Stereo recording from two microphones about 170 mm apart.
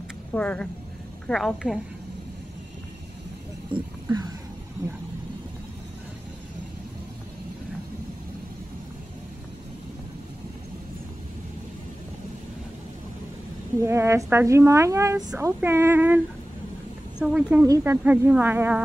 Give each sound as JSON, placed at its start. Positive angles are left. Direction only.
{"t": 0.3, "sound": "a woman's voice", "side_deg": 10}
{"t": 3.7, "sound": "speech", "side_deg": -25}
{"t": 13.8, "sound": "a woman's voice", "side_deg": -15}
{"t": 17.2, "sound": "a woman's voice", "side_deg": -5}
{"t": 17.6, "sound": "speech", "side_deg": -20}
{"t": 18.0, "sound": "a woman's voice", "side_deg": -10}